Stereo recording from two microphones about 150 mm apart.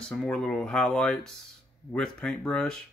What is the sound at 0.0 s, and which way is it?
Speech, 5° left (ahead or behind).